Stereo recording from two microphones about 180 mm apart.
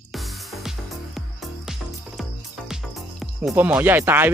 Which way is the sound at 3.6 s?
10° right (ahead or behind).